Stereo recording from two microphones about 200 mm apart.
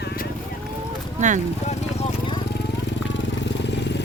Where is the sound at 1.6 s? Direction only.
35° left (ahead or behind).